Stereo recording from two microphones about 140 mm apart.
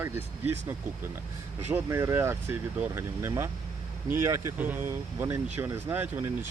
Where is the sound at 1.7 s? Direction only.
20° right (ahead or behind).